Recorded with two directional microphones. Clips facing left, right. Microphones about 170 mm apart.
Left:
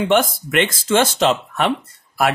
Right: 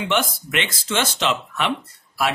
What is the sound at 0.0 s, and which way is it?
Speech, 45° left (ahead or behind).